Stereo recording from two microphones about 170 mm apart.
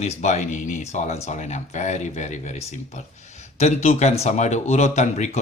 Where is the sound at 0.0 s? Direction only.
45° left (ahead or behind).